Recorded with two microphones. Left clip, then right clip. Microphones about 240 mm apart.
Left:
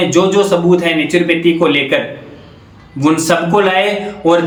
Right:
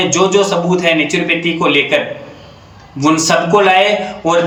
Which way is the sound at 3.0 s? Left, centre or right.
Centre.